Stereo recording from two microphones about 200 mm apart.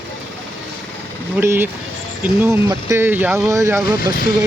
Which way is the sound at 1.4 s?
10° right (ahead or behind).